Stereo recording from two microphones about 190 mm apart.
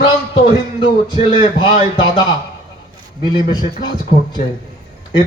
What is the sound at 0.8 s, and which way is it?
A man's voice, 25° left (ahead or behind).